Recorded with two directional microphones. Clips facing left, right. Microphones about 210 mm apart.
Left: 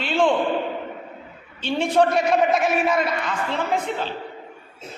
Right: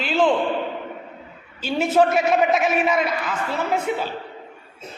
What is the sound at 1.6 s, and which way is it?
A man's voice, 5° right (ahead or behind).